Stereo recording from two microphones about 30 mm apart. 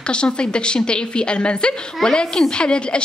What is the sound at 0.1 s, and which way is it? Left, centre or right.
A woman's voice, left.